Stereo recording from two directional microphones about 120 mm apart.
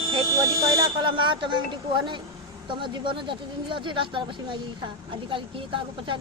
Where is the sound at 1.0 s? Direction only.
45° right (ahead or behind).